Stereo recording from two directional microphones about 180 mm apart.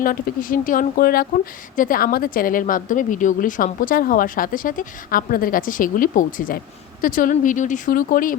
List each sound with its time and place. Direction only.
0.0 s speech: 50° left (ahead or behind)